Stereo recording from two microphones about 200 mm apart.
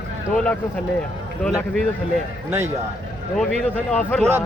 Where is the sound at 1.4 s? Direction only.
5° right (ahead or behind).